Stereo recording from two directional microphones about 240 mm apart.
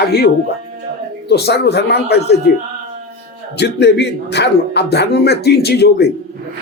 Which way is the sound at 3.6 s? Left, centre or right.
Left.